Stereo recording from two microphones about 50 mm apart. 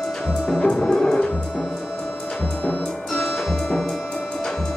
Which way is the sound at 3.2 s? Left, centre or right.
Centre.